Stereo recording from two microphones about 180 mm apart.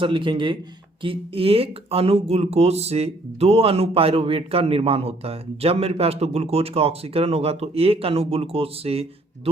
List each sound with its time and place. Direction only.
0.0 s speech: 25° right (ahead or behind)